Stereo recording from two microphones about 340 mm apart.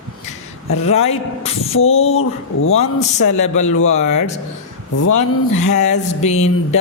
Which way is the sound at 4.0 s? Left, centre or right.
Left.